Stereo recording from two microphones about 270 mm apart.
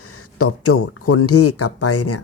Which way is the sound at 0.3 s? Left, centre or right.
Left.